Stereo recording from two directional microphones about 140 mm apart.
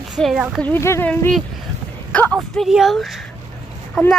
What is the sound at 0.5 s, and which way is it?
Speech, 10° left (ahead or behind).